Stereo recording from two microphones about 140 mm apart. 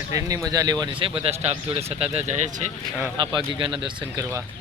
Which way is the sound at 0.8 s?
35° right (ahead or behind).